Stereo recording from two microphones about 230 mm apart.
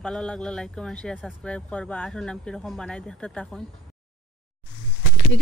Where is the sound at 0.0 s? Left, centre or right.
Centre.